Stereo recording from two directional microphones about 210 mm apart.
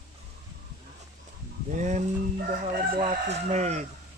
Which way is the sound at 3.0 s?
30° right (ahead or behind).